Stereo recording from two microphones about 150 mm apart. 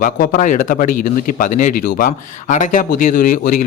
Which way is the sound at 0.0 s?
60° left (ahead or behind).